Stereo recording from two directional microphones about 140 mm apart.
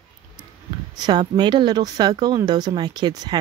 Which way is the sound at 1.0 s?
30° right (ahead or behind).